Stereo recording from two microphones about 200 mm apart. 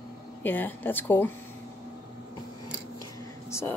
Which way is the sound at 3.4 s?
15° left (ahead or behind).